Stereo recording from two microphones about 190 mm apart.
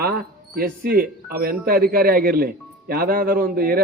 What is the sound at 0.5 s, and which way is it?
A man's voice, 50° right (ahead or behind).